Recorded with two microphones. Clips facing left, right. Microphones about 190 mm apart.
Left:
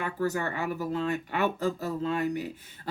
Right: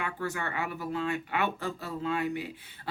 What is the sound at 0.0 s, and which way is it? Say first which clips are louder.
Speech: left 5 dB; 40° left (ahead or behind).